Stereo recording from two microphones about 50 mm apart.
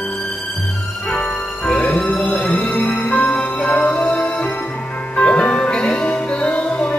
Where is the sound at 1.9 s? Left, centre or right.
Centre.